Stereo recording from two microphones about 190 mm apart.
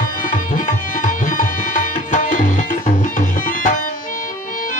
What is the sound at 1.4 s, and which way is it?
Tabla, 40° left (ahead or behind).